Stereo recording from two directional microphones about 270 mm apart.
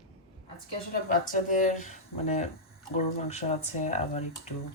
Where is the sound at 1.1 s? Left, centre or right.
Left.